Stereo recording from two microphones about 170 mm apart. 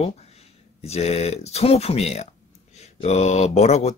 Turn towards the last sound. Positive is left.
turn(degrees=40)  # may be behind; listen again after turning